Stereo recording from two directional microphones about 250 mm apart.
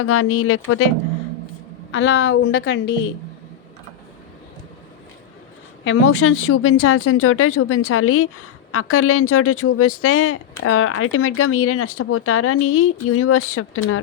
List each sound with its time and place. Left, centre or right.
0.0 s speech: left
1.9 s a woman's voice: left
5.8 s speech: left